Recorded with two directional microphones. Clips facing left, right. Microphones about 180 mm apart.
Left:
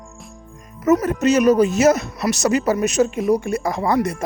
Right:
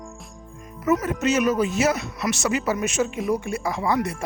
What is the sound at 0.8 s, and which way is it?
Speech, 40° left (ahead or behind).